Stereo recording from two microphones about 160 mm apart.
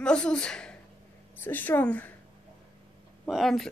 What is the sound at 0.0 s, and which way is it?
A woman's voice, 5° left (ahead or behind).